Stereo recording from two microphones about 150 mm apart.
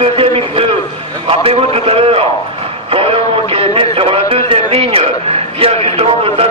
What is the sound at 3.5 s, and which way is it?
A man's voice, 40° right (ahead or behind).